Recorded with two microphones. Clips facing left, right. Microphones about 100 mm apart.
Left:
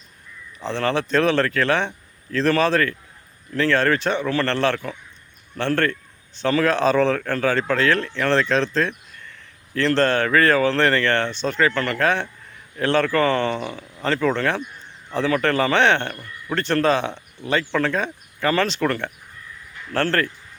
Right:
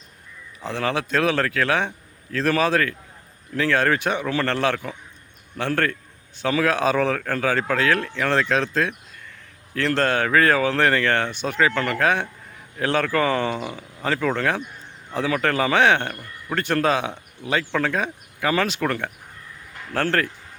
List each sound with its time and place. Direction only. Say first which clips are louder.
0.6 s a man's voice: left 2 dB; 5° right (ahead or behind)